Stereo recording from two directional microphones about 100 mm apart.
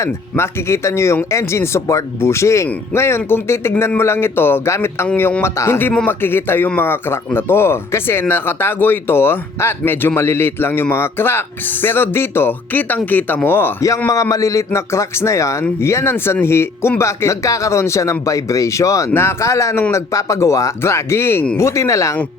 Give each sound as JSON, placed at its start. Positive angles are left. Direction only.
{"t": 0.0, "sound": "speech", "side_deg": 30}
{"t": 14.1, "sound": "speech", "side_deg": 35}